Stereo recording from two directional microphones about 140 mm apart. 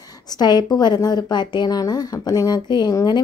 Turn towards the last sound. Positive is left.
turn(degrees=25)  # may be behind; listen again after turning